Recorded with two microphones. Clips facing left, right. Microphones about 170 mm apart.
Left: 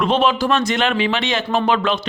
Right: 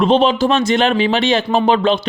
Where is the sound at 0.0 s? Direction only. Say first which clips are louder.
Right 4 dB; 30° right (ahead or behind).